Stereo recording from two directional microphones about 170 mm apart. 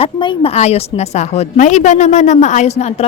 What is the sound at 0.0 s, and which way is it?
A woman's voice, 30° left (ahead or behind).